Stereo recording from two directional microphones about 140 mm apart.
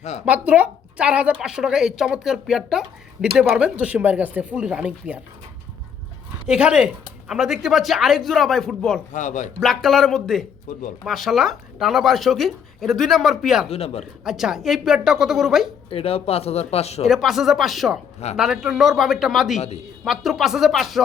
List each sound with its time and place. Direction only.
0.3 s a woman's voice: 10° right (ahead or behind)
6.5 s a woman's voice: 5° right (ahead or behind)
9.1 s speech: 65° left (ahead or behind)
9.6 s speech: centre (ahead or behind)
13.7 s speech: 45° left (ahead or behind)
14.0 s speech: centre (ahead or behind)
15.9 s speech: 45° left (ahead or behind)
17.1 s speech: centre (ahead or behind)
19.5 s speech: 50° left (ahead or behind)
20.1 s speech: centre (ahead or behind)